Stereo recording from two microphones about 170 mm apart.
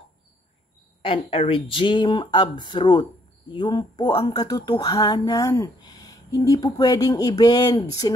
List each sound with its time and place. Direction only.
1.0 s speech: 35° left (ahead or behind)